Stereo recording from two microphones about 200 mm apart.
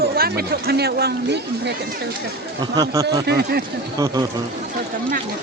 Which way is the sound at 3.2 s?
55° right (ahead or behind).